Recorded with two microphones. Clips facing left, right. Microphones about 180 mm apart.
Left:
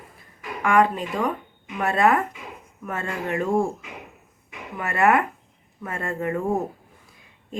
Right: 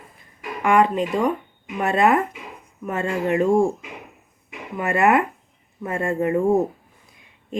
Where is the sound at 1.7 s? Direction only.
20° right (ahead or behind).